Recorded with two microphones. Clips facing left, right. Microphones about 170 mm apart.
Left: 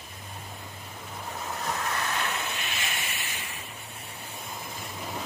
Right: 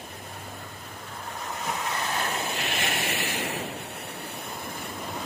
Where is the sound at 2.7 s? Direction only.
65° right (ahead or behind).